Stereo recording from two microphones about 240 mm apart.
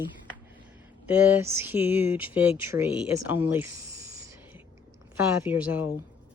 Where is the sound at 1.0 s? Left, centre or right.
Centre.